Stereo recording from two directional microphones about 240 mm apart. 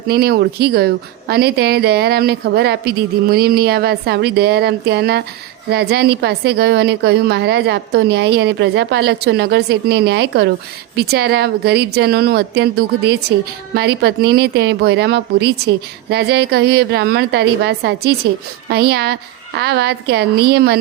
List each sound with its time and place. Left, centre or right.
0.1 s a woman's voice: right